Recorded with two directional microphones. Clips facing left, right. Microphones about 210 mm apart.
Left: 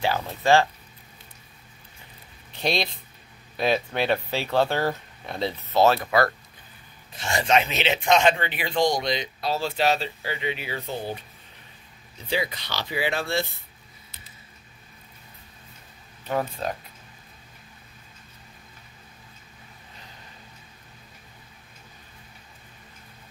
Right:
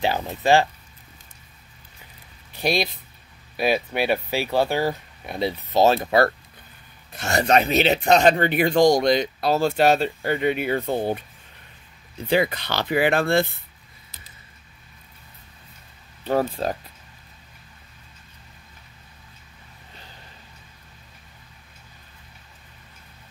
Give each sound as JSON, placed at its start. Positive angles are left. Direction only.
{"t": 0.0, "sound": "speech", "side_deg": -20}
{"t": 2.5, "sound": "speech", "side_deg": -5}
{"t": 7.2, "sound": "speech", "side_deg": -40}
{"t": 12.3, "sound": "speech", "side_deg": -55}
{"t": 16.3, "sound": "speech", "side_deg": -35}